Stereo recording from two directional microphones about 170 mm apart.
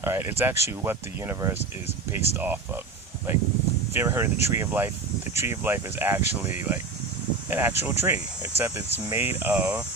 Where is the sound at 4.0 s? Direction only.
15° right (ahead or behind).